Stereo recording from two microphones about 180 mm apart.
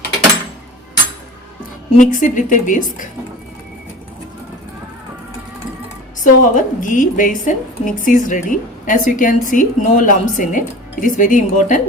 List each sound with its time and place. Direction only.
2.0 s a woman's voice: 45° left (ahead or behind)
6.2 s a woman's voice: 45° left (ahead or behind)